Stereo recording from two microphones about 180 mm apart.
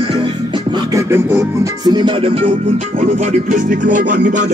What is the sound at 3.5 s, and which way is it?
Music, 45° right (ahead or behind).